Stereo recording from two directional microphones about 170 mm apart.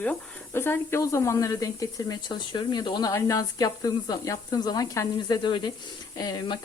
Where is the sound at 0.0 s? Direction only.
10° left (ahead or behind).